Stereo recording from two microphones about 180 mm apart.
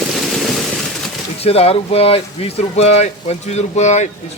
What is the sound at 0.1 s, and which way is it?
Rain, centre (ahead or behind).